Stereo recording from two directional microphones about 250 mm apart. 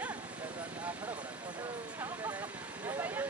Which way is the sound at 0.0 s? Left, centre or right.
Centre.